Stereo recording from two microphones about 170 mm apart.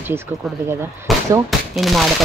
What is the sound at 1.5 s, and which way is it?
Speech, centre (ahead or behind).